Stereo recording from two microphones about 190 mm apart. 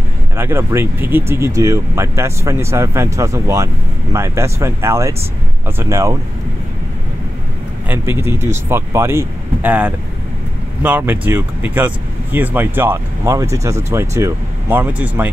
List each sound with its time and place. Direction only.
0.4 s speech: 10° right (ahead or behind)
7.9 s speech: 10° right (ahead or behind)